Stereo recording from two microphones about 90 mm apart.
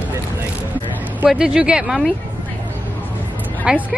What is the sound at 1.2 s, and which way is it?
Speech, 5° right (ahead or behind).